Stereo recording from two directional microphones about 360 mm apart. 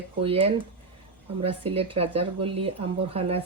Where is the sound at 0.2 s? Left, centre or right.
Centre.